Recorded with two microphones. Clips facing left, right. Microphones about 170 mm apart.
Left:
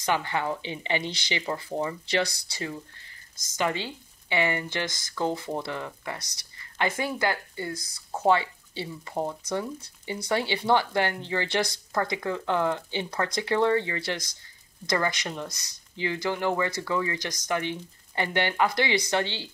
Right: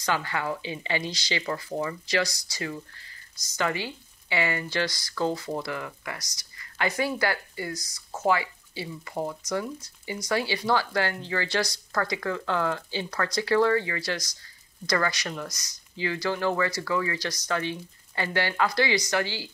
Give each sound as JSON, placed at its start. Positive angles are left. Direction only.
{"t": 0.0, "sound": "speech", "side_deg": 20}